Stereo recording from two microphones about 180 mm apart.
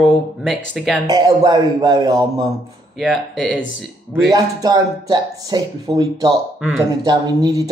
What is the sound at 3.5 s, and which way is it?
Speech, 90° left.